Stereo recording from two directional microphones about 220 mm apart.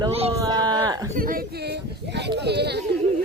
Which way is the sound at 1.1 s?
40° right (ahead or behind).